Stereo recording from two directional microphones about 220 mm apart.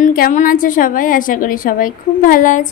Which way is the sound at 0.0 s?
40° left (ahead or behind).